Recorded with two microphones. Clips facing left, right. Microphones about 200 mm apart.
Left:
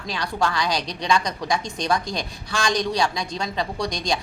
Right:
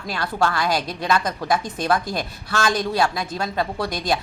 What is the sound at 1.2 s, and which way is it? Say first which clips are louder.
A woman's voice: right 3 dB; 5° right (ahead or behind).